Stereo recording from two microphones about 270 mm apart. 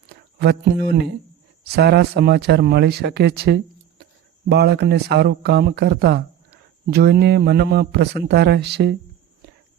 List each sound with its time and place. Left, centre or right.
0.1 s speech: right